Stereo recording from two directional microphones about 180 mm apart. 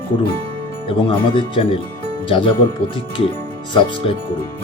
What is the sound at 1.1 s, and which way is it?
Speech, 30° left (ahead or behind).